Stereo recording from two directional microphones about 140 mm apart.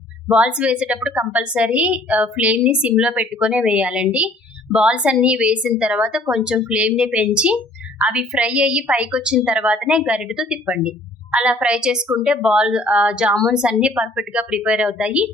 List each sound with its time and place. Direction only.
0.3 s speech: 10° right (ahead or behind)